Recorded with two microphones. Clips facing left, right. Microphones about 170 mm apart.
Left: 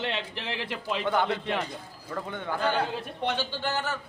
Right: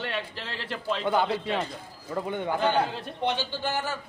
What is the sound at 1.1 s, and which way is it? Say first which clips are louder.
A man's voice: right 1 dB; 15° right (ahead or behind).